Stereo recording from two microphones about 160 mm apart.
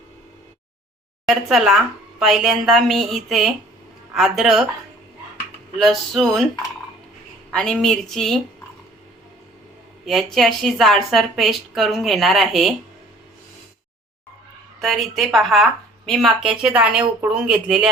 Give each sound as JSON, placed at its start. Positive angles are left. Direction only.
{"t": 1.2, "sound": "a woman's voice", "side_deg": 0}
{"t": 5.7, "sound": "a woman's voice", "side_deg": 0}
{"t": 7.5, "sound": "a woman's voice", "side_deg": 5}
{"t": 10.1, "sound": "a woman's voice", "side_deg": 0}
{"t": 14.8, "sound": "a woman's voice", "side_deg": 0}